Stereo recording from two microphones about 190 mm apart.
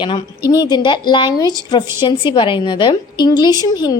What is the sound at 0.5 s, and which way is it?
A woman's voice, 20° left (ahead or behind).